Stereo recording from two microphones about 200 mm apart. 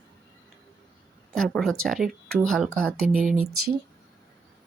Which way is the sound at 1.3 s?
Centre (ahead or behind).